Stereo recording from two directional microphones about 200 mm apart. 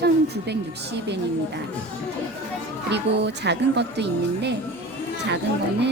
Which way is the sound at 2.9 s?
60° right (ahead or behind).